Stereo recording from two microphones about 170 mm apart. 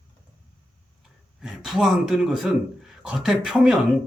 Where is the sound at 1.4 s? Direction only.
5° right (ahead or behind).